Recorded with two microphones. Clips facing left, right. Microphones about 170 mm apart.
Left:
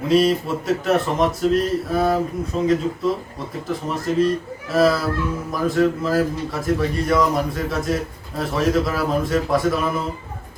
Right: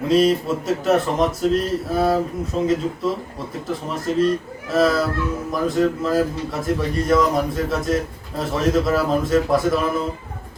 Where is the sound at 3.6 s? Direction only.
Centre (ahead or behind).